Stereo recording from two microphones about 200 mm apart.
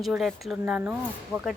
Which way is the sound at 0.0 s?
Centre (ahead or behind).